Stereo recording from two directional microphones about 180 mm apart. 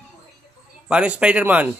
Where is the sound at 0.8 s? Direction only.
5° right (ahead or behind).